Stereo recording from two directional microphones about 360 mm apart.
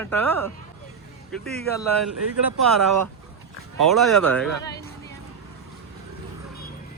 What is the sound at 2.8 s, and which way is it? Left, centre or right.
Speech, right.